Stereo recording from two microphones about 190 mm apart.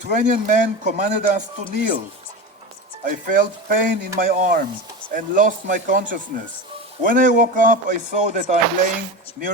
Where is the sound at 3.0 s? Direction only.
45° right (ahead or behind).